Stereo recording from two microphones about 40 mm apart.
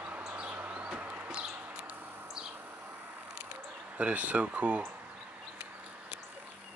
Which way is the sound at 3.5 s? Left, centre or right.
Right.